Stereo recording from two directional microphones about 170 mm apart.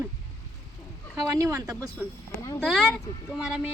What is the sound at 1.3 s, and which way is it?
Speech, 15° right (ahead or behind).